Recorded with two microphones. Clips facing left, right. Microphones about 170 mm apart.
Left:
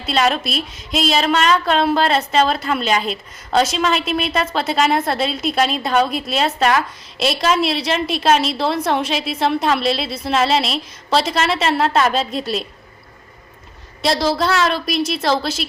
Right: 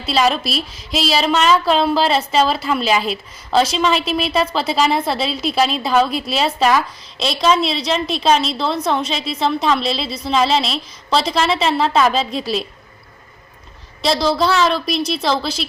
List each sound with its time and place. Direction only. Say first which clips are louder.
0.0 s a woman's voice: right 1 dB; centre (ahead or behind)
9.3 s a woman's voice: even; 55° left (ahead or behind)
9.7 s a woman's voice: left 1 dB; centre (ahead or behind)
14.0 s a woman's voice: right 1 dB; centre (ahead or behind)